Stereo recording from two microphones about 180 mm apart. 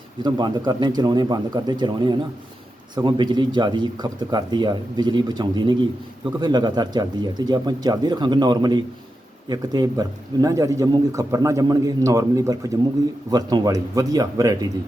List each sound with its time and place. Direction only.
0.2 s speech: 25° right (ahead or behind)